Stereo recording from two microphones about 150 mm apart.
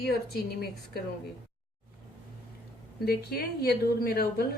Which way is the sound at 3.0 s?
90° left.